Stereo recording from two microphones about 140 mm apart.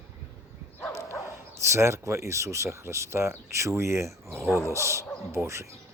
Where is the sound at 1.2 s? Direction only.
20° right (ahead or behind).